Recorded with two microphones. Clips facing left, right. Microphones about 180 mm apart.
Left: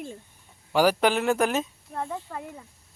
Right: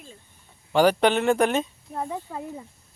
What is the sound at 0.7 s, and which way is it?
Speech, 5° left (ahead or behind).